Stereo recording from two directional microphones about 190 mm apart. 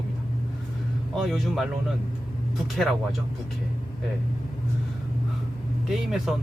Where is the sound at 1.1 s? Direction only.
Centre (ahead or behind).